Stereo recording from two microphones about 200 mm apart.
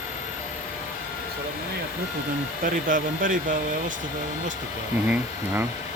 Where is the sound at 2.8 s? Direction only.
40° right (ahead or behind).